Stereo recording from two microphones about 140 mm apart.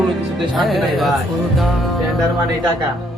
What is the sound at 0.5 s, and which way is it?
Music, centre (ahead or behind).